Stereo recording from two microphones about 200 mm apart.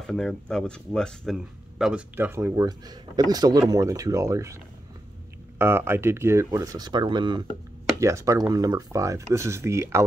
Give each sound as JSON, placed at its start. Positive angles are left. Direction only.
{"t": 0.0, "sound": "speech", "side_deg": 0}
{"t": 5.6, "sound": "speech", "side_deg": -10}